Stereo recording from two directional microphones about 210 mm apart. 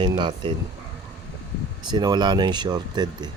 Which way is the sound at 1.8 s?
20° right (ahead or behind).